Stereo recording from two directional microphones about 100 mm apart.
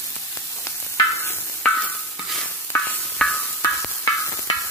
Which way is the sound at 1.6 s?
15° left (ahead or behind).